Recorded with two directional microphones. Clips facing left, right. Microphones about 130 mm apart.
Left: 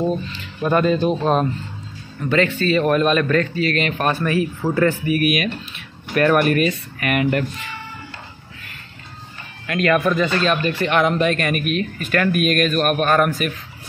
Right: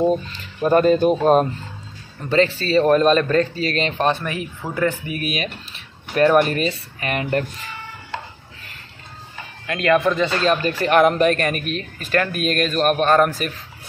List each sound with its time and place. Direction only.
0.7 s speech: 40° right (ahead or behind)
2.2 s speech: 35° right (ahead or behind)
9.7 s speech: 25° right (ahead or behind)